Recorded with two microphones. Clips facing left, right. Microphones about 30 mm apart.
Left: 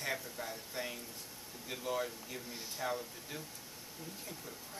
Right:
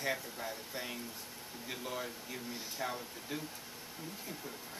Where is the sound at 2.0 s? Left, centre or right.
Centre.